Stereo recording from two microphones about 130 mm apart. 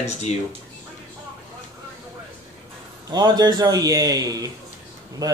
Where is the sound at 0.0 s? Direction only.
60° left (ahead or behind).